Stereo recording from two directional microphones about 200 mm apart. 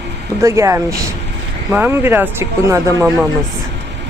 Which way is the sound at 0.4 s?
15° right (ahead or behind).